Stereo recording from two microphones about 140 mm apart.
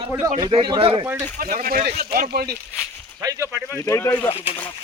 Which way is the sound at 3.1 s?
20° right (ahead or behind).